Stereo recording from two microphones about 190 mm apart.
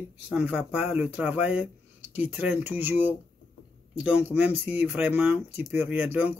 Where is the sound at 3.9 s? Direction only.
5° right (ahead or behind).